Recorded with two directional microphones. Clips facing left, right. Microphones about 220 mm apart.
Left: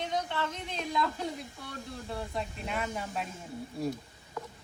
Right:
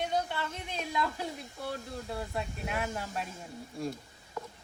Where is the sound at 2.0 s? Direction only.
5° right (ahead or behind).